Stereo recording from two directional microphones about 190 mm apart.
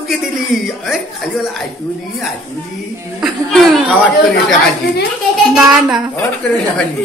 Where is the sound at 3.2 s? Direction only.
Centre (ahead or behind).